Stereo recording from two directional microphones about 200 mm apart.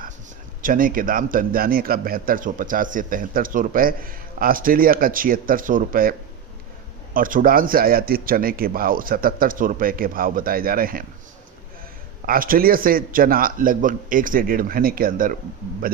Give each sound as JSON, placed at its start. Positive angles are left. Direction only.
{"t": 0.6, "sound": "a man's voice", "side_deg": -45}
{"t": 12.2, "sound": "a man's voice", "side_deg": -45}